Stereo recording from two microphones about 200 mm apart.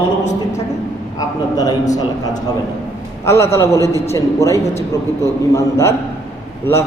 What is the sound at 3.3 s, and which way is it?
A man's voice, 15° left (ahead or behind).